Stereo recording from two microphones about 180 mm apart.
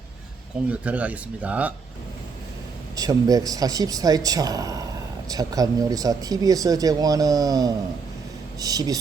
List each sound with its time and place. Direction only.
0.7 s speech: 5° right (ahead or behind)
2.9 s speech: 20° right (ahead or behind)